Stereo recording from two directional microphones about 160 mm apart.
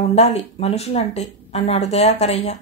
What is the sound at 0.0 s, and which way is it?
Speech, 40° left (ahead or behind).